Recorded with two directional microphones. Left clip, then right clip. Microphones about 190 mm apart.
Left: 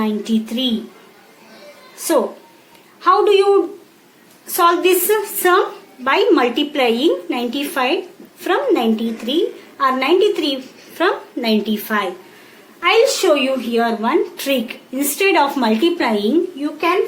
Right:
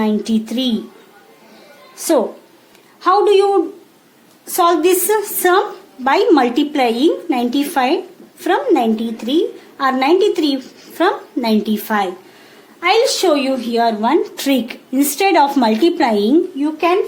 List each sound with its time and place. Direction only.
0.0 s a woman's voice: 65° right (ahead or behind)
2.0 s a woman's voice: 65° right (ahead or behind)
4.4 s a woman's voice: 65° right (ahead or behind)